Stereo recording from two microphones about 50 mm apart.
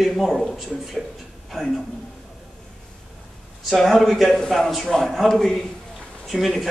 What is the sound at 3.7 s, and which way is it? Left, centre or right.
Speech, centre.